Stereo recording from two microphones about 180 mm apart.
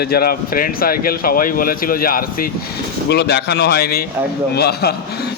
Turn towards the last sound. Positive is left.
turn(degrees=65)  # may be behind; listen again after turning